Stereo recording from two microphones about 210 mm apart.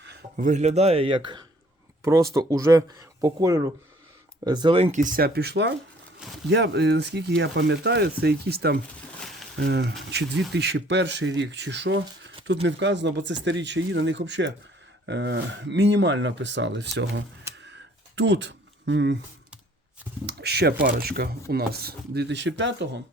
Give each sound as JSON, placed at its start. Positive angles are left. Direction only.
{"t": 0.3, "sound": "speech", "side_deg": -35}
{"t": 20.2, "sound": "speech", "side_deg": -50}